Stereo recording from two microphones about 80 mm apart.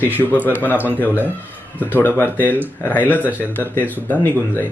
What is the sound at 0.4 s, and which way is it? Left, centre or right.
Speech, left.